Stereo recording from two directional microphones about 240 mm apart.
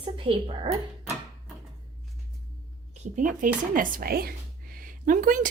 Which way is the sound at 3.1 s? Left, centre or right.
Right.